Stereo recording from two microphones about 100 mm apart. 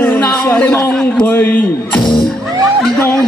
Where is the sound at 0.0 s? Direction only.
15° left (ahead or behind).